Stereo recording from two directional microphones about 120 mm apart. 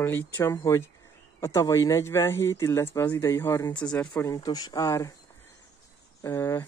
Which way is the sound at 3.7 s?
10° left (ahead or behind).